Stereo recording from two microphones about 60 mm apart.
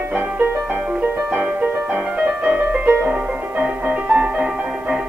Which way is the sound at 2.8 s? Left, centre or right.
Right.